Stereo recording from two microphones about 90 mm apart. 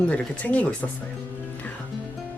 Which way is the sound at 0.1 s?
15° left (ahead or behind).